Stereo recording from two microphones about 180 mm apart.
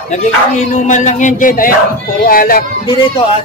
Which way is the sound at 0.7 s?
45° left (ahead or behind).